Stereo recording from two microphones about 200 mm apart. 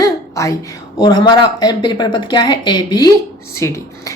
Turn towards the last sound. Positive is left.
turn(degrees=15)  # may be behind; listen again after turning